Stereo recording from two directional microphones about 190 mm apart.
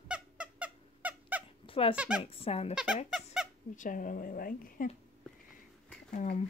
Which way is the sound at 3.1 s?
5° right (ahead or behind).